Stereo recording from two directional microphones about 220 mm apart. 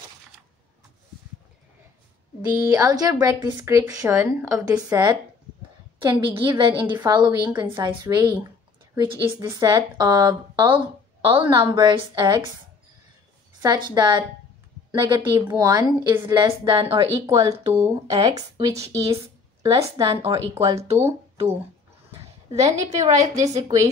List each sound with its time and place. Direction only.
2.4 s a woman's voice: 15° right (ahead or behind)
13.6 s a woman's voice: 20° right (ahead or behind)
17.6 s speech: 25° right (ahead or behind)
19.6 s speech: 15° right (ahead or behind)
22.5 s a woman's voice: 15° right (ahead or behind)